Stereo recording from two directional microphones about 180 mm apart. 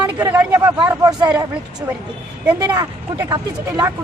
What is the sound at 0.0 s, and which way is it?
Speech, 10° right (ahead or behind).